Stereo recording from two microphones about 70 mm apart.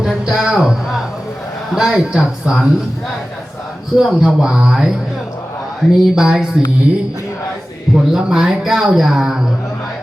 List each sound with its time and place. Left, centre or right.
0.0 s a sound: centre
1.7 s speech: centre
3.9 s speech: centre
7.9 s speech: centre